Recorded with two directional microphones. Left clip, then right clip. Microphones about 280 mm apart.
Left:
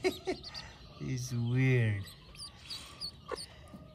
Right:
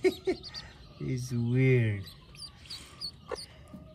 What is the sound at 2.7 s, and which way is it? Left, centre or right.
Dog, centre.